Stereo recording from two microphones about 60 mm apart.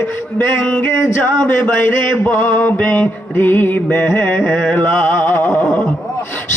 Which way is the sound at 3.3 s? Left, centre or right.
Left.